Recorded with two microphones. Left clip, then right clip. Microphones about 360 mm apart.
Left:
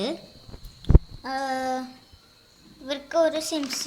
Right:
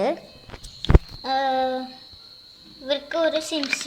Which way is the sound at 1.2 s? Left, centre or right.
Centre.